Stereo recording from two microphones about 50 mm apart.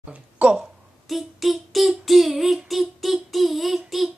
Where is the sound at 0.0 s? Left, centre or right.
Right.